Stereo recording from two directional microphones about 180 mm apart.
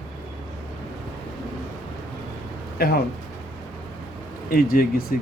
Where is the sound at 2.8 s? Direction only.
60° left (ahead or behind).